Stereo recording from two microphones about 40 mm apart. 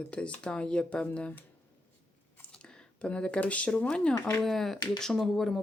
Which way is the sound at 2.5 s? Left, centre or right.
Left.